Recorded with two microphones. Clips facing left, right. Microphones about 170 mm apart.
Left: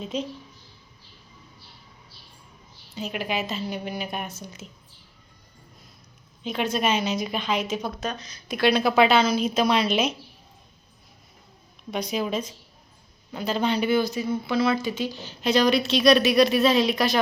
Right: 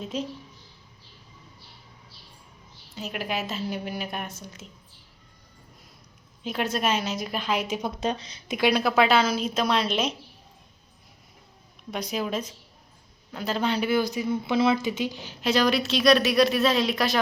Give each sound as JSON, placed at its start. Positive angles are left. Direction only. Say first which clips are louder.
{"t": 0.0, "sound": "speech", "louder": "left 1 dB", "side_deg": -5}
{"t": 2.9, "sound": "speech", "louder": "left 2 dB", "side_deg": 0}
{"t": 6.4, "sound": "speech", "louder": "left 2 dB", "side_deg": -5}
{"t": 8.0, "sound": "speech", "louder": "right 3 dB", "side_deg": -30}
{"t": 8.5, "sound": "speech", "louder": "left 2 dB", "side_deg": -10}
{"t": 8.8, "sound": "speech", "louder": "left 3 dB", "side_deg": 0}
{"t": 11.9, "sound": "speech", "louder": "left 2 dB", "side_deg": 0}
{"t": 14.0, "sound": "speech", "louder": "left 1 dB", "side_deg": -15}